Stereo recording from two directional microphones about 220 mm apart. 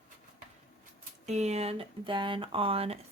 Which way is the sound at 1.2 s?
30° right (ahead or behind).